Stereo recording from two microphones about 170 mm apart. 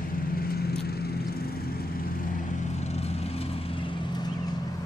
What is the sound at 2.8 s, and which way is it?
Vehicle, 40° left (ahead or behind).